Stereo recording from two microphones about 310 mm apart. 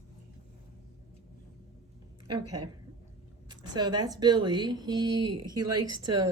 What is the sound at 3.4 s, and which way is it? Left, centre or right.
Speech, centre.